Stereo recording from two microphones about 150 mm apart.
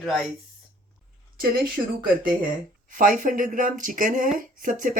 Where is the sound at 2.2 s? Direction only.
65° right (ahead or behind).